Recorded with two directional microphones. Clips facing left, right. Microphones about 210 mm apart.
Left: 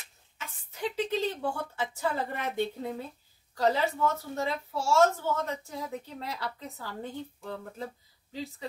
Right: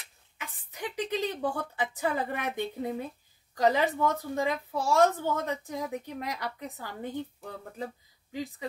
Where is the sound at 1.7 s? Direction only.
15° right (ahead or behind).